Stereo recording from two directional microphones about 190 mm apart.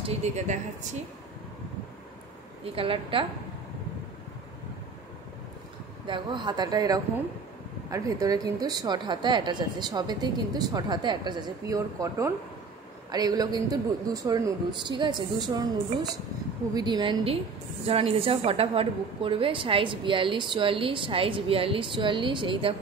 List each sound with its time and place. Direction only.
0.0 s speech: 35° right (ahead or behind)
2.6 s a woman's voice: 30° right (ahead or behind)
6.0 s a woman's voice: 25° right (ahead or behind)